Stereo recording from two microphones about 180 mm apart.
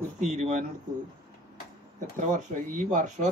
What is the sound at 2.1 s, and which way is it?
Speech, 45° right (ahead or behind).